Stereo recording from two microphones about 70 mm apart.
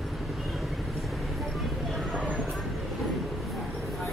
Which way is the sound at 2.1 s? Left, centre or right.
Centre.